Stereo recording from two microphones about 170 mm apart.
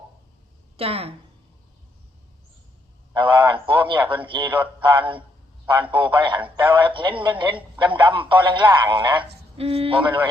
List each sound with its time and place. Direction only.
0.8 s a man's voice: 35° right (ahead or behind)
3.2 s a man's voice: 30° right (ahead or behind)